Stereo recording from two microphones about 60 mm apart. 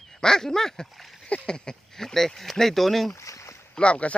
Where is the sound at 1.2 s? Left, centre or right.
Centre.